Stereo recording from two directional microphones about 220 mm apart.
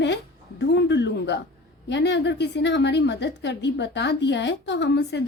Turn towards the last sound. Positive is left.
turn(degrees=50)  # may be behind; listen again after turning